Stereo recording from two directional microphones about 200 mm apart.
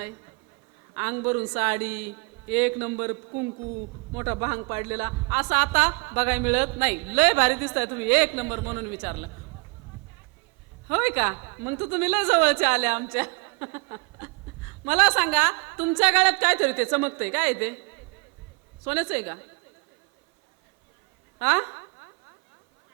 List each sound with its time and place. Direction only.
0.9 s a woman's voice: 10° right (ahead or behind)
4.2 s a woman's voice: 10° right (ahead or behind)
10.8 s a woman's voice: 10° right (ahead or behind)
13.4 s a sound: 15° right (ahead or behind)
14.8 s a woman's voice: 5° right (ahead or behind)
18.9 s a woman's voice: 10° right (ahead or behind)
21.3 s a sound: 10° right (ahead or behind)